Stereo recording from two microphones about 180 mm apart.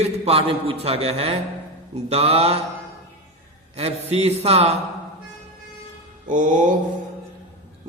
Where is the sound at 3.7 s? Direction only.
35° right (ahead or behind).